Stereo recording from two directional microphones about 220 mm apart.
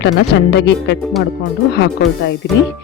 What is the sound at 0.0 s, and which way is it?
Speech, 50° left (ahead or behind).